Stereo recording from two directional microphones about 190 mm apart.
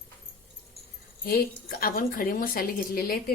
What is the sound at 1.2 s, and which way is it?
A woman's voice, 50° left (ahead or behind).